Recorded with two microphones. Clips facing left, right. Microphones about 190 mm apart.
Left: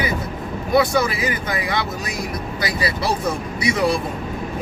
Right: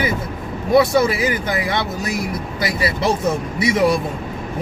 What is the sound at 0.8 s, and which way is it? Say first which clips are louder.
Speech: right 3 dB; 25° right (ahead or behind).